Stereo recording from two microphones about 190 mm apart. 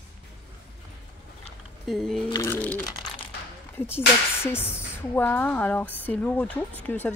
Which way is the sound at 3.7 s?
10° left (ahead or behind).